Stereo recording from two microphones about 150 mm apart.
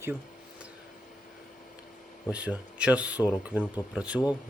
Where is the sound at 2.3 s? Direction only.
5° right (ahead or behind).